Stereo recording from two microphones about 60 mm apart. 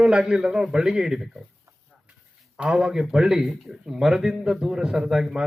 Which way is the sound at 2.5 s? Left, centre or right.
Centre.